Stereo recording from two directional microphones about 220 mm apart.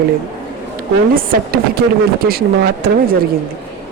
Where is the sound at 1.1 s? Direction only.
40° right (ahead or behind).